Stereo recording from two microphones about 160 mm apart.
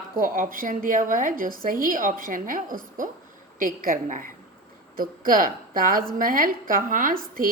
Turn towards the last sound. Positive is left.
turn(degrees=-65)  # may be behind; listen again after turning